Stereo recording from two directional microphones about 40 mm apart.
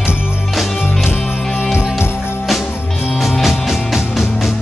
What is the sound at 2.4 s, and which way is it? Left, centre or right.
Music, centre.